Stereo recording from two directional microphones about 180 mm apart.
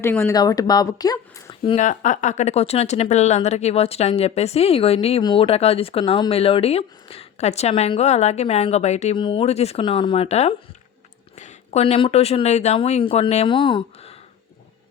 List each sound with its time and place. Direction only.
0.0 s speech: 15° left (ahead or behind)
1.6 s speech: 40° left (ahead or behind)